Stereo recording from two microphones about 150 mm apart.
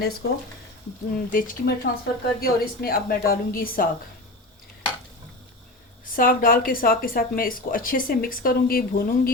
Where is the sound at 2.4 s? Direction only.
85° left; by 3.9 s 70° left (ahead or behind).